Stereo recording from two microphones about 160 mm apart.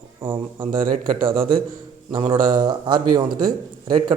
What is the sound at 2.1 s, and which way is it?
Speech, 30° right (ahead or behind).